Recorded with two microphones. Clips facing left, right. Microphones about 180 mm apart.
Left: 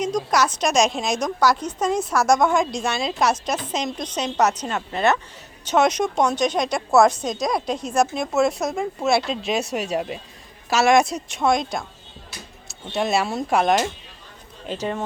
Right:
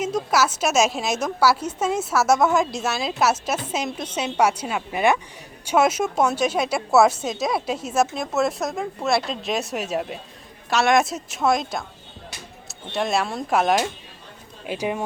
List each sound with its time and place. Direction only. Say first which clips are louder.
0.0 s a woman's voice: even; 5° right (ahead or behind)